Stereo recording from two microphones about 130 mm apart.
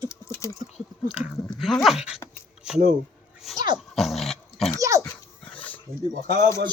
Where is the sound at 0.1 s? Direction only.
25° left (ahead or behind).